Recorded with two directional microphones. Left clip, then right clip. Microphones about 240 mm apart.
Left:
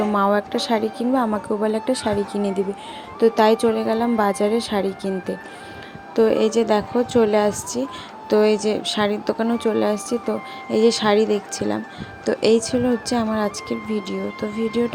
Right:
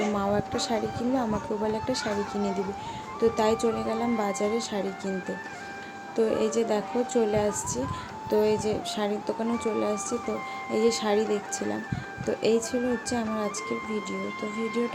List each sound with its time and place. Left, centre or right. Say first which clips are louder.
0.1 s a woman's voice: left 8 dB; left
6.1 s a woman's voice: left 8 dB; centre
14.2 s speech: left 6 dB; centre